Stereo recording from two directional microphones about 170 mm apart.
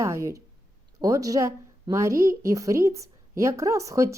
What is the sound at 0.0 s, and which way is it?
A woman's voice, 15° right (ahead or behind).